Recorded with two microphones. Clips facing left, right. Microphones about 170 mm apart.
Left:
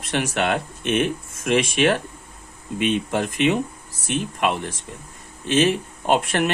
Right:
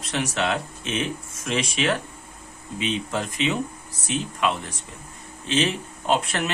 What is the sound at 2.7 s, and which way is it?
Speech, 55° left (ahead or behind).